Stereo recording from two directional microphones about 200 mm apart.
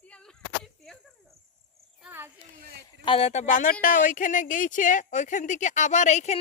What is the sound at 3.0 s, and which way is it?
Speech, 30° left (ahead or behind).